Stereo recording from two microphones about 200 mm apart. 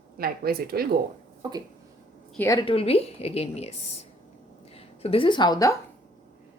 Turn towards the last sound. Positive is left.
turn(degrees=20)  # may be behind; listen again after turning